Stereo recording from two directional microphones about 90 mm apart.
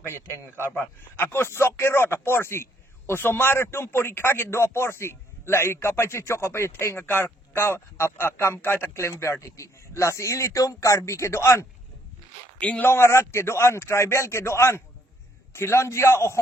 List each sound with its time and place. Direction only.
0.1 s speech: 30° left (ahead or behind)
12.5 s speech: 15° left (ahead or behind)
12.8 s speech: 30° left (ahead or behind)